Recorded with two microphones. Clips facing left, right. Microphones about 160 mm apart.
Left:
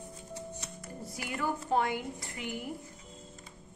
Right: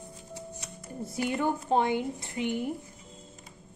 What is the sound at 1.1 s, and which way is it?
A woman's voice, 25° right (ahead or behind).